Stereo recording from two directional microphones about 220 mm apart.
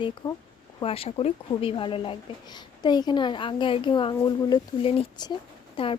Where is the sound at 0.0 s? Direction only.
20° left (ahead or behind).